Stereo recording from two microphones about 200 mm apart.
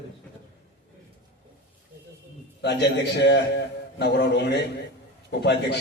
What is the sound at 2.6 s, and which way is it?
A man's voice, 60° left (ahead or behind).